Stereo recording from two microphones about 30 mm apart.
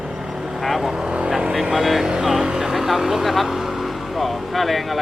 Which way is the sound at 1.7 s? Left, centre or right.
Centre.